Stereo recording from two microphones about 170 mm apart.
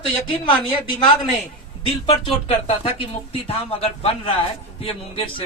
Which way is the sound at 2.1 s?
30° left (ahead or behind).